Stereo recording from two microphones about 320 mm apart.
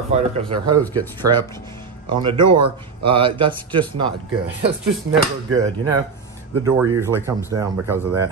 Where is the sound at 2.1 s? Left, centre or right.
Centre.